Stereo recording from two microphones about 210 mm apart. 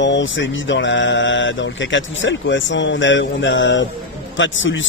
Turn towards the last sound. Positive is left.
turn(degrees=65)  # may be behind; listen again after turning